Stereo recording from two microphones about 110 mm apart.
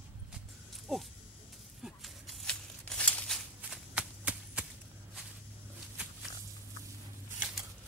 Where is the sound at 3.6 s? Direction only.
10° right (ahead or behind).